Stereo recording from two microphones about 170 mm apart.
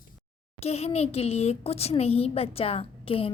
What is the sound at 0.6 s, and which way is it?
A woman's voice, 40° left (ahead or behind).